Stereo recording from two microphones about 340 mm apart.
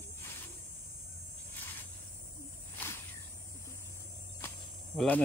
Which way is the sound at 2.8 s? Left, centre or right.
Centre.